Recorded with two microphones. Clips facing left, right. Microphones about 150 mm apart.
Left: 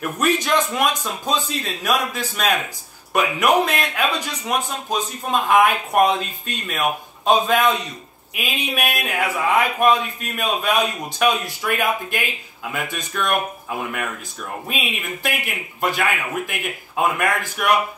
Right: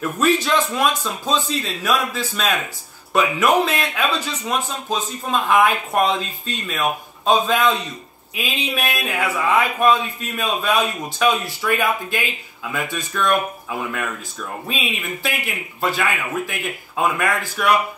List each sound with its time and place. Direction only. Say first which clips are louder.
0.4 s a man's voice: even; 15° left (ahead or behind)
14.7 s a man's voice: right 2 dB; 15° left (ahead or behind)